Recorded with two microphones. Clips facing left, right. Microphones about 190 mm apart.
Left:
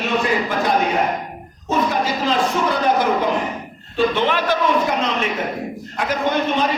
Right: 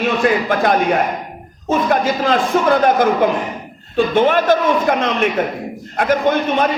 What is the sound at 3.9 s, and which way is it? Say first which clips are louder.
A man's voice: right 5 dB; 50° right (ahead or behind).